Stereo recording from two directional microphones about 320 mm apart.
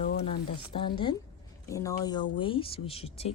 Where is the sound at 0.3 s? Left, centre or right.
Centre.